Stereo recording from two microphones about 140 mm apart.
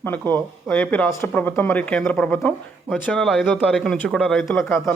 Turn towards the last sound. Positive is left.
turn(degrees=20)  # may be behind; listen again after turning